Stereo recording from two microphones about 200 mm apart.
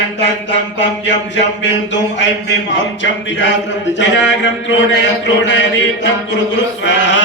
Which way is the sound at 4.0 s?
65° left (ahead or behind).